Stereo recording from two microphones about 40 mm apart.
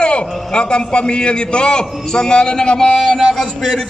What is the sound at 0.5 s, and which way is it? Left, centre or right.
A man's voice, left.